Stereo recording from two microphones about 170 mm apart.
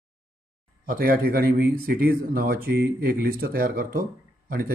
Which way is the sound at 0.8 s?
60° right (ahead or behind).